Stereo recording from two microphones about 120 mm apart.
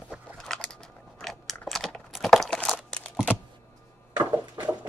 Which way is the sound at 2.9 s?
5° left (ahead or behind).